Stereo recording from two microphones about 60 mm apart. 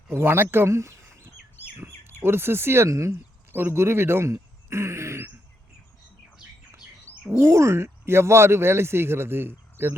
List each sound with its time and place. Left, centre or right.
0.1 s speech: right
2.2 s speech: right
2.9 s speech: right
3.5 s speech: right
7.1 s bird: left
7.4 s speech: right